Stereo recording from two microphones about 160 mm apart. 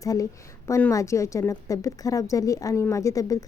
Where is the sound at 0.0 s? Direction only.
20° left (ahead or behind).